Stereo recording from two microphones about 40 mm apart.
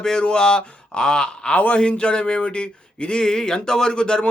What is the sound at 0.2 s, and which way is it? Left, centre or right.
Speech, left.